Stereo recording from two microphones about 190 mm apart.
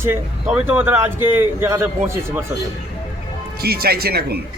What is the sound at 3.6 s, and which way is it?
Speech, 55° right (ahead or behind).